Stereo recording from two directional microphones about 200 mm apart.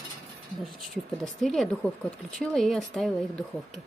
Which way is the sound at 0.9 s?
Centre (ahead or behind).